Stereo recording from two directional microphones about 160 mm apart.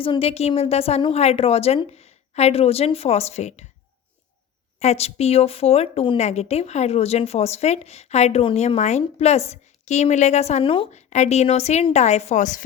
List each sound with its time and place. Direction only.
0.0 s a woman's voice: 35° left (ahead or behind)
4.8 s a woman's voice: 40° left (ahead or behind)
10.9 s speech: 45° left (ahead or behind)